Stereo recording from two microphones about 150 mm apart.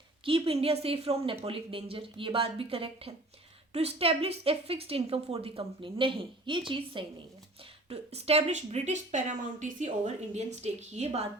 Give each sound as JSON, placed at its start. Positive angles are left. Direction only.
{"t": 0.3, "sound": "a woman's voice", "side_deg": -40}